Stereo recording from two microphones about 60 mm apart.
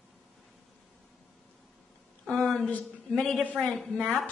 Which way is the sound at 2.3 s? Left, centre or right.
Centre.